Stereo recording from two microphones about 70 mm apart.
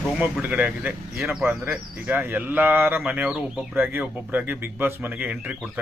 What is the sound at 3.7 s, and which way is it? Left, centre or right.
A man's voice, right.